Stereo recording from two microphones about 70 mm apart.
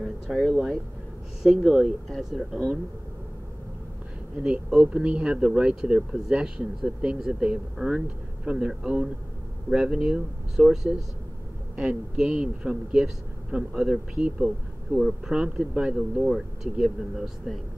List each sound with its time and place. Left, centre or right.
0.0 s speech: centre
4.4 s speech: centre